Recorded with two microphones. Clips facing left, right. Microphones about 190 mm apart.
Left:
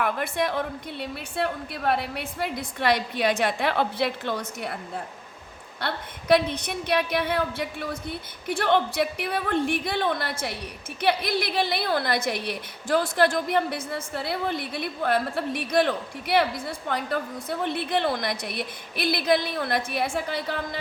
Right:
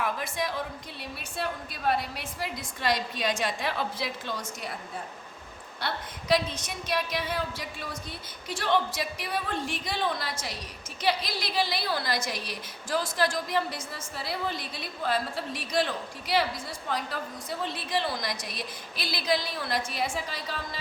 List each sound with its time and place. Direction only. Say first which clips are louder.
0.0 s a woman's voice: left 5 dB; 60° left (ahead or behind)
5.8 s a woman's voice: left 3 dB; 60° left (ahead or behind)